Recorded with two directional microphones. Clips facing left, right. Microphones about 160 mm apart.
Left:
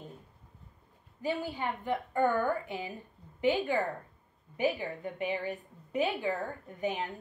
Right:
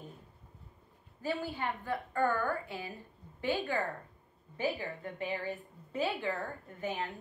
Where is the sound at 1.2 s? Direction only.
15° left (ahead or behind).